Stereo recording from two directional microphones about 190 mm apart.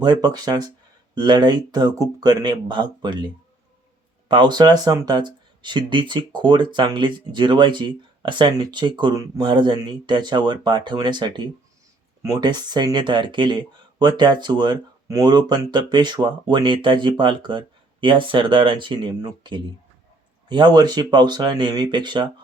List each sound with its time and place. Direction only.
0.0 s speech: 20° right (ahead or behind)